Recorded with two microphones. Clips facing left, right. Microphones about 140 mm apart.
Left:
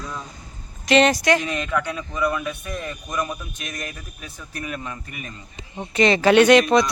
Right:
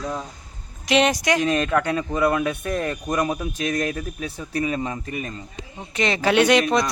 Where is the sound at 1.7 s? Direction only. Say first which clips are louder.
Right 4 dB; 45° right (ahead or behind).